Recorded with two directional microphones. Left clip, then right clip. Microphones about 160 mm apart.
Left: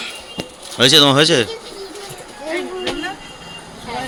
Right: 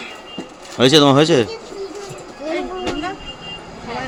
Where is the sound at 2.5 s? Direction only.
90° right.